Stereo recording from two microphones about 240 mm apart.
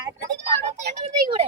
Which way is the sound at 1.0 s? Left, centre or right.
Right.